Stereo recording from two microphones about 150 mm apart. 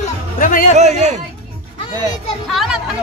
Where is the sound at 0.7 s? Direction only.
50° right (ahead or behind).